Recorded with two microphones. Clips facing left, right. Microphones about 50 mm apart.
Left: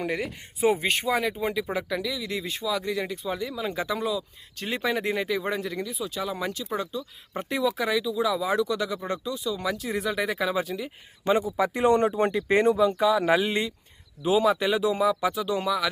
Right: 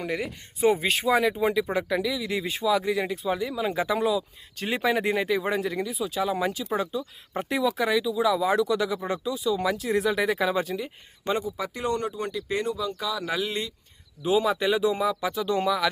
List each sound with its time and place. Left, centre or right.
0.0 s speech: centre
11.3 s speech: centre
14.2 s speech: centre